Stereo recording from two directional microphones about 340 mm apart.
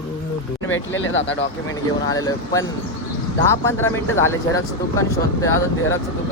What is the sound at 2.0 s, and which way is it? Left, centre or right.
Speech, centre.